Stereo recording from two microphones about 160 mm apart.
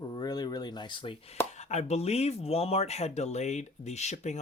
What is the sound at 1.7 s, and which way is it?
Speech, 45° left (ahead or behind).